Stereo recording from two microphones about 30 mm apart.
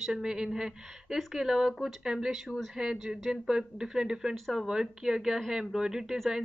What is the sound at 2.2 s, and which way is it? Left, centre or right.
Speech, centre.